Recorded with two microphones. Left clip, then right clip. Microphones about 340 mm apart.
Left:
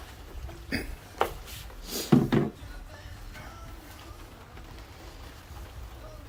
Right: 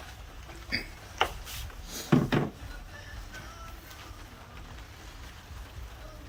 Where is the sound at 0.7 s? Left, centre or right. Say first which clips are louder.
Right 1 dB; centre.